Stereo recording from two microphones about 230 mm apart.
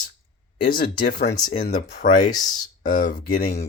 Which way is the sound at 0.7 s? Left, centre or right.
Left.